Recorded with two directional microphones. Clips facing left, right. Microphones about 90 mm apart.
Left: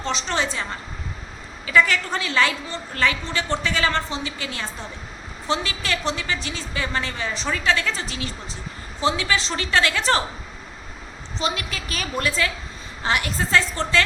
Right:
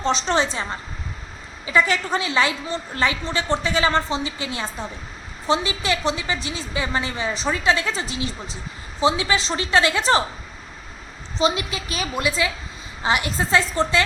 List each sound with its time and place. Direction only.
0.0 s a woman's voice: 25° right (ahead or behind)
1.6 s a woman's voice: 20° right (ahead or behind)
11.3 s a woman's voice: 20° right (ahead or behind)